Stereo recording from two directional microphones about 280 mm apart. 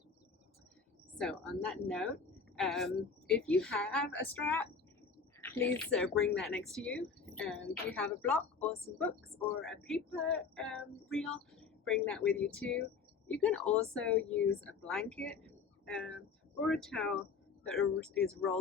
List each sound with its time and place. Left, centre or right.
1.2 s speech: centre